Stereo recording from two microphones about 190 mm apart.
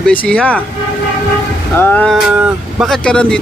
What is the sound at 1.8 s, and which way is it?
Speech, 10° left (ahead or behind).